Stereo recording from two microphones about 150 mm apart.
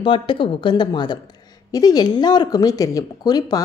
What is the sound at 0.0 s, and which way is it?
Speech, 35° left (ahead or behind).